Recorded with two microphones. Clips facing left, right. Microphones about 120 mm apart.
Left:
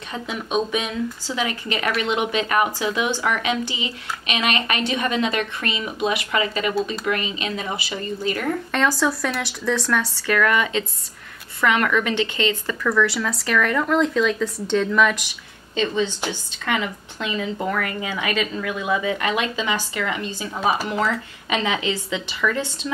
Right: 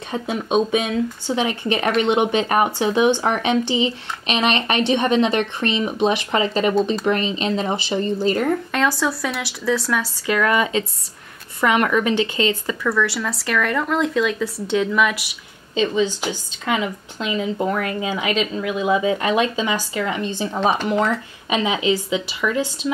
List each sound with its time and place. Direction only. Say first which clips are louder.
0.1 s speech: right 4 dB; 30° right (ahead or behind)
4.3 s speech: right 4 dB; 30° right (ahead or behind)
8.7 s speech: even; centre (ahead or behind)
10.2 s speech: right 2 dB; 20° right (ahead or behind)
12.2 s speech: right 2 dB; 30° right (ahead or behind)
12.6 s speech: even; 5° right (ahead or behind)
15.7 s speech: right 3 dB; 15° right (ahead or behind)